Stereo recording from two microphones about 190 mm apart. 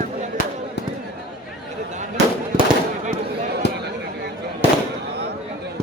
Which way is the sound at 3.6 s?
65° left (ahead or behind).